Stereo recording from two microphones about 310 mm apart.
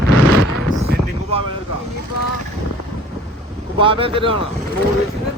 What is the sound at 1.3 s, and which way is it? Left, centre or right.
Vehicle, centre.